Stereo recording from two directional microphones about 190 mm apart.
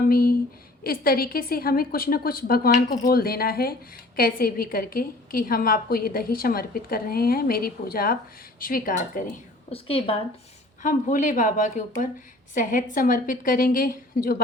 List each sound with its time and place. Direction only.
0.1 s a woman's voice: 50° left (ahead or behind)
9.6 s a woman's voice: 30° left (ahead or behind)
10.8 s a woman's voice: 40° left (ahead or behind)